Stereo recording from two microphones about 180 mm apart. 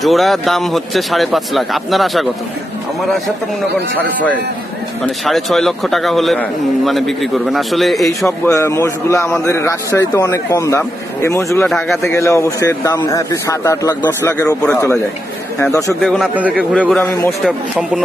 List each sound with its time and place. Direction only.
0.0 s a man's voice: centre (ahead or behind)
3.9 s a man's voice: 10° left (ahead or behind)
8.4 s a man's voice: 15° left (ahead or behind)
11.6 s a man's voice: centre (ahead or behind)
12.0 s a man's voice: 15° left (ahead or behind)
16.0 s a man's voice: centre (ahead or behind)